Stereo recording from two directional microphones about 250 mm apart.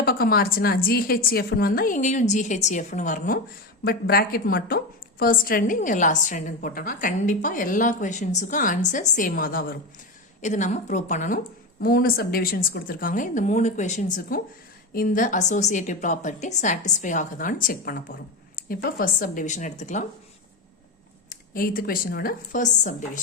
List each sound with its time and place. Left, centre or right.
0.0 s a woman's voice: left
21.2 s a woman's voice: left